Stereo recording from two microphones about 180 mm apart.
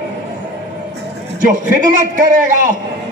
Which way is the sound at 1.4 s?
45° right (ahead or behind).